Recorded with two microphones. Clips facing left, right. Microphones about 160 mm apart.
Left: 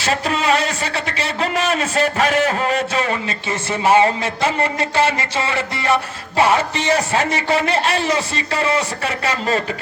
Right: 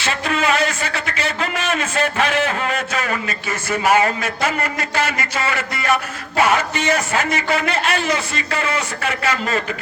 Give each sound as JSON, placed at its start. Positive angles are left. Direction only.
{"t": 0.0, "sound": "a man's voice", "side_deg": 35}